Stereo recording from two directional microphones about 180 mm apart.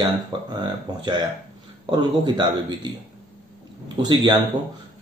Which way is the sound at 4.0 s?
25° right (ahead or behind).